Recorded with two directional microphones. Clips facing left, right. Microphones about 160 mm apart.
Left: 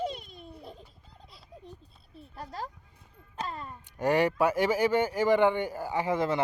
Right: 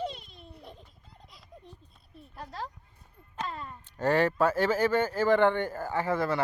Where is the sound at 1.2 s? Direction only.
35° left (ahead or behind).